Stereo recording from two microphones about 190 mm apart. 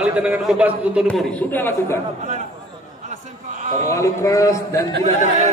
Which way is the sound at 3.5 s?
40° right (ahead or behind).